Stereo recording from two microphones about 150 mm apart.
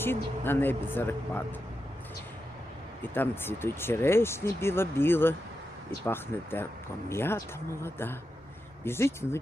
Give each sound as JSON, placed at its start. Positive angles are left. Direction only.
{"t": 0.0, "sound": "speech", "side_deg": 15}
{"t": 3.0, "sound": "speech", "side_deg": 15}